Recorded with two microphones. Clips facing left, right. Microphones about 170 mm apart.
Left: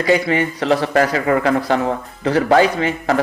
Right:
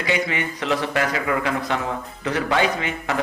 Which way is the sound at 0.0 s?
35° left (ahead or behind).